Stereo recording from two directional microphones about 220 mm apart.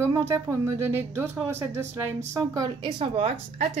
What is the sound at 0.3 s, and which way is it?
A woman's voice, 10° right (ahead or behind).